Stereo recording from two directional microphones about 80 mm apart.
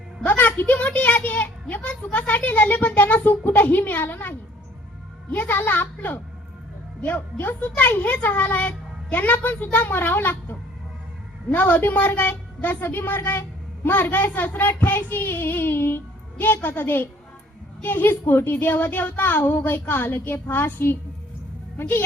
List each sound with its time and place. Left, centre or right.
0.3 s speech: left